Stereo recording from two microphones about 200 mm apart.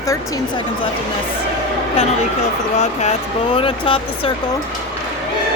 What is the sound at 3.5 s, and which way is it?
Speech, 25° left (ahead or behind).